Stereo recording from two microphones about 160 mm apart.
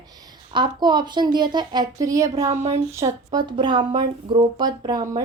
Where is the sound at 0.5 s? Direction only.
30° right (ahead or behind).